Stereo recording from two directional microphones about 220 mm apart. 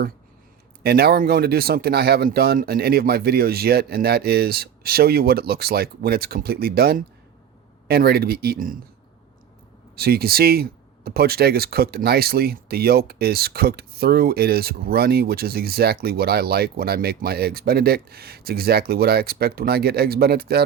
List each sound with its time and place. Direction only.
0.8 s speech: 45° right (ahead or behind)
9.9 s speech: 45° right (ahead or behind)